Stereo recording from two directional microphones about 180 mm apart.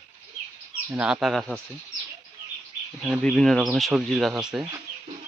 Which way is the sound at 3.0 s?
5° left (ahead or behind).